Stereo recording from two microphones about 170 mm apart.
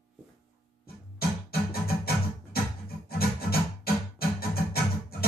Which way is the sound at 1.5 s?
65° left (ahead or behind).